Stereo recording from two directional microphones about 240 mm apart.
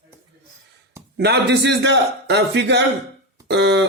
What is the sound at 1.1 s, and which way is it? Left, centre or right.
Speech, right.